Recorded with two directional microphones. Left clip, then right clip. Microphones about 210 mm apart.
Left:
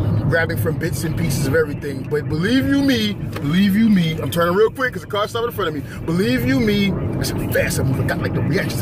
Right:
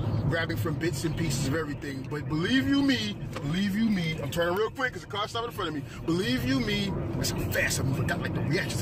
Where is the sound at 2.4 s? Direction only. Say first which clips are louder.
Left 6 dB; 10° left (ahead or behind).